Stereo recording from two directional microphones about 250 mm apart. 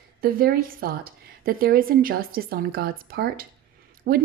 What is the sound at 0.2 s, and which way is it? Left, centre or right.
Speech, right.